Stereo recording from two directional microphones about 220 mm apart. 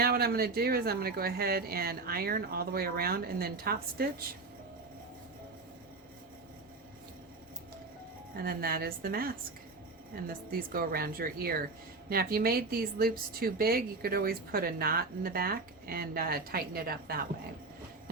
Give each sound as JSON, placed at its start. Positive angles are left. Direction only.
{"t": 0.0, "sound": "a woman's voice", "side_deg": -45}
{"t": 8.4, "sound": "a woman's voice", "side_deg": -45}